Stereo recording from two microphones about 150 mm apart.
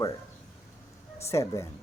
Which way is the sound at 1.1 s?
20° left (ahead or behind).